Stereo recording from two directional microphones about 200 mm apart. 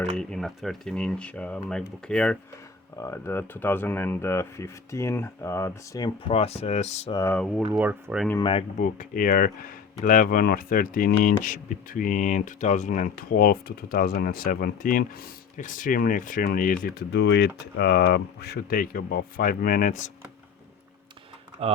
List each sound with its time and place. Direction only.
0.2 s speech: 5° left (ahead or behind); by 7.1 s 35° left (ahead or behind)
7.1 s speech: 15° left (ahead or behind)
7.3 s speech: centre (ahead or behind)
7.7 s speech: 10° right (ahead or behind)
8.4 s speech: 25° left (ahead or behind)
8.8 s speech: 45° left (ahead or behind)
21.6 s speech: 30° right (ahead or behind)